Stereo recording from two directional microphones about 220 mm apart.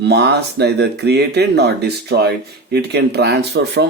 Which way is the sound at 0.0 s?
50° right (ahead or behind).